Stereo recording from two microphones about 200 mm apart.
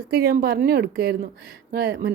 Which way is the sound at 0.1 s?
50° right (ahead or behind).